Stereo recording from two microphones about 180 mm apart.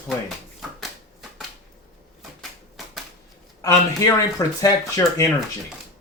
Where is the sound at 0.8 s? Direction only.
Centre (ahead or behind).